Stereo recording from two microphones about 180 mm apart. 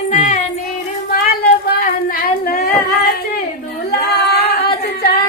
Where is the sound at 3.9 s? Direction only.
60° left (ahead or behind).